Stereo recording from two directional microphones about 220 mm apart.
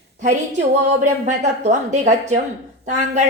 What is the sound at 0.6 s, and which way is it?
A woman's voice, 35° right (ahead or behind).